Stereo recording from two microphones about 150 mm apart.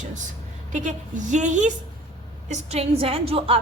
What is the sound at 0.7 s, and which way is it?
A woman's voice, 55° right (ahead or behind).